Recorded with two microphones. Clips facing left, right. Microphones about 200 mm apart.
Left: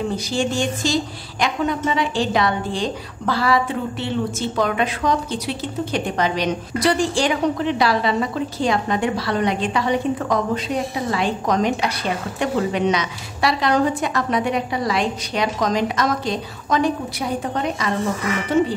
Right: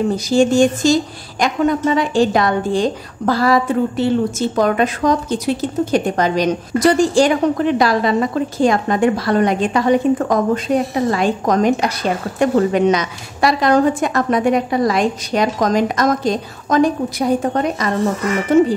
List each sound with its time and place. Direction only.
0.1 s a woman's voice: 45° right (ahead or behind)